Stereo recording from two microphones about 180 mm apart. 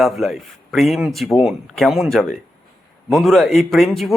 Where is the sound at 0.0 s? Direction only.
Centre (ahead or behind).